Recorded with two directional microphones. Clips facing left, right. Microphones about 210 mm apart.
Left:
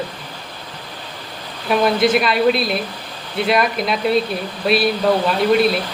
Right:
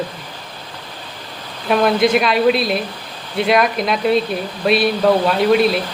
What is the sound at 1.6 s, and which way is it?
Speech, centre (ahead or behind).